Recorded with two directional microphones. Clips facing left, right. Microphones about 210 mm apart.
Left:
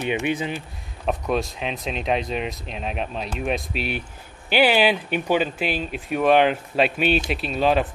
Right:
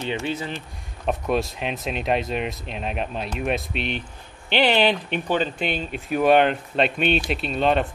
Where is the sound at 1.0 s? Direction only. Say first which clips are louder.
Even; centre (ahead or behind).